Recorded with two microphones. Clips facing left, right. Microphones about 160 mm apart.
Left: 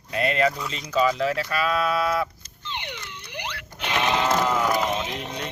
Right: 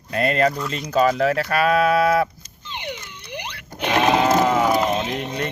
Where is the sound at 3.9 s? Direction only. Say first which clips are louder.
Right 6 dB; 45° right (ahead or behind).